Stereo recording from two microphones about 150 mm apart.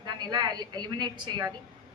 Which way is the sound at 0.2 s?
30° right (ahead or behind).